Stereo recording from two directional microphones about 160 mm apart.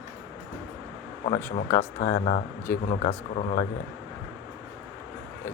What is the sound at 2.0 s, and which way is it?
Speech, 55° left (ahead or behind).